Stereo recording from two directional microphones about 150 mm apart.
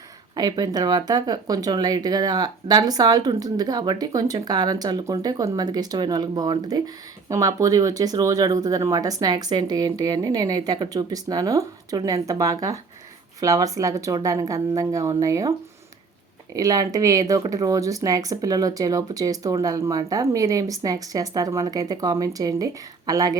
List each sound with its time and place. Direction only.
0.3 s speech: 25° right (ahead or behind)
16.6 s speech: 25° right (ahead or behind)